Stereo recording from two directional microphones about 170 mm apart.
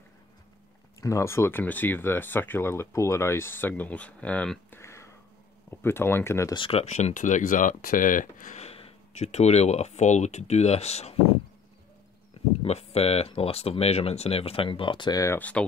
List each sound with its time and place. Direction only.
1.0 s speech: 15° left (ahead or behind)
6.5 s speech: 35° left (ahead or behind)
12.6 s speech: 35° left (ahead or behind); by 15.6 s 10° left (ahead or behind)